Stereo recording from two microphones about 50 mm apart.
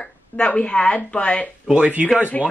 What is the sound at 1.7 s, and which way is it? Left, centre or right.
Speech, right.